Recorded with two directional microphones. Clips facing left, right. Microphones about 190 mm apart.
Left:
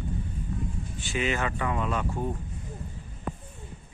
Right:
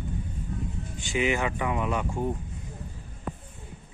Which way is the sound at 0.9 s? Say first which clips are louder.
Right 3 dB; 15° right (ahead or behind).